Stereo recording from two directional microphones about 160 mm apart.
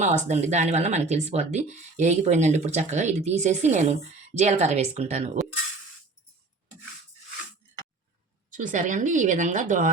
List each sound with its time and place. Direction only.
0.0 s speech: 45° right (ahead or behind)
8.5 s speech: 55° right (ahead or behind)